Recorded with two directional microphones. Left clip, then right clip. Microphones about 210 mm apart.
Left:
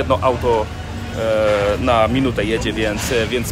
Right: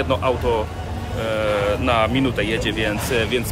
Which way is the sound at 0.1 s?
5° right (ahead or behind).